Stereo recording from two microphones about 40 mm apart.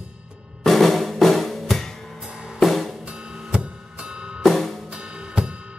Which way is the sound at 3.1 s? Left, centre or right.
Right.